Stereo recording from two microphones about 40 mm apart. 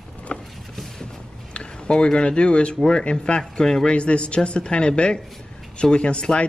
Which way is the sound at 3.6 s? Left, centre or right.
Centre.